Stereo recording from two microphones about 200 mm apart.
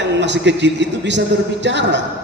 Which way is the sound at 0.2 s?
60° right (ahead or behind).